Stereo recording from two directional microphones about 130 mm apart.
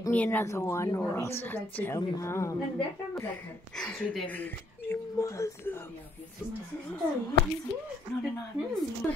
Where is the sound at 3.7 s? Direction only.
5° left (ahead or behind).